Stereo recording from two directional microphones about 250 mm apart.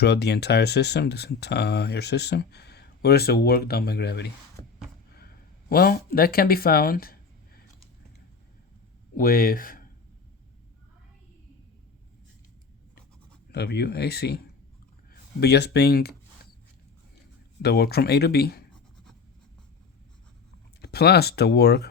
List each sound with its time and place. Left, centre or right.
0.0 s speech: left
5.1 s a sound: left
9.1 s speech: left
13.5 s speech: left
17.6 s speech: left
20.8 s speech: left